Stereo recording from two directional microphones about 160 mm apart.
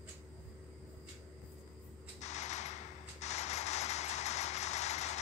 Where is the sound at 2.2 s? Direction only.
45° left (ahead or behind).